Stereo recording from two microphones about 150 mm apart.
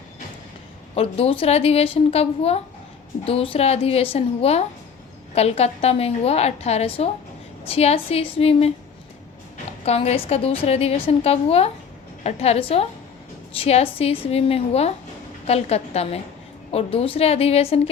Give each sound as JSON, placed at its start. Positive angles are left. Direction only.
{"t": 0.9, "sound": "a woman's voice", "side_deg": 40}
{"t": 9.8, "sound": "a woman's voice", "side_deg": 45}